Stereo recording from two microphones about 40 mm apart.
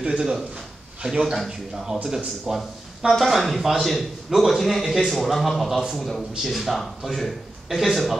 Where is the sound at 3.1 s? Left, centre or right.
Centre.